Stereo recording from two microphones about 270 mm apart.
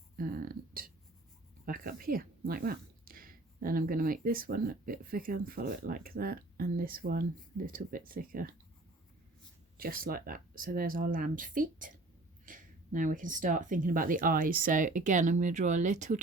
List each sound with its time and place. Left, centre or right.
0.2 s a sound: right
1.6 s a woman's voice: right
9.7 s a woman's voice: right